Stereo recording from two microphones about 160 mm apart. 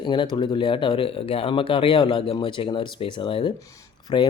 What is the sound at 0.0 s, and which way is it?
Speech, 30° left (ahead or behind).